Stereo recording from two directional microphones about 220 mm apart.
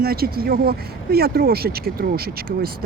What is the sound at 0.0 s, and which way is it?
Speech, 45° right (ahead or behind).